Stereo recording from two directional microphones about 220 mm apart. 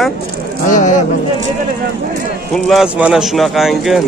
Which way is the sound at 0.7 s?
35° left (ahead or behind).